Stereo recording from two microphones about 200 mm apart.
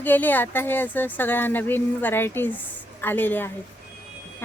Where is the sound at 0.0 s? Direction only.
10° left (ahead or behind).